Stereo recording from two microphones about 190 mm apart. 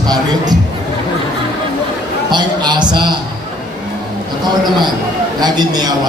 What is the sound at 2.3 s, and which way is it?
Speech, 25° right (ahead or behind).